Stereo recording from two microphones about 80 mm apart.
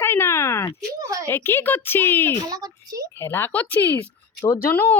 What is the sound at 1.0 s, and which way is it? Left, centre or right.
Speech, right.